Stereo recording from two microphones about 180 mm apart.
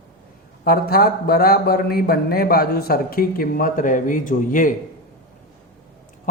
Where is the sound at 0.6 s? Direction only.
55° left (ahead or behind).